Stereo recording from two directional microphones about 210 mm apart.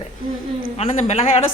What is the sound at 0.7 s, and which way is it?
Speech, 30° left (ahead or behind).